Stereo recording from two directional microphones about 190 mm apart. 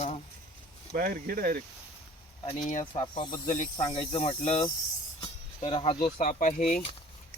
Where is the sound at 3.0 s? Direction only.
25° left (ahead or behind).